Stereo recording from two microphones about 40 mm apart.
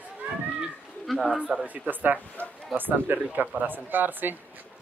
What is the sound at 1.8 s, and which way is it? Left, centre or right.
Speech, right.